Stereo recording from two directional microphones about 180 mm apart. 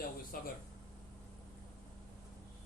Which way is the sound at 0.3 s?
50° left (ahead or behind).